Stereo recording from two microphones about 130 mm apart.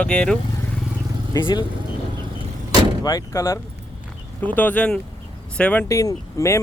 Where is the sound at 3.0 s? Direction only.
25° left (ahead or behind).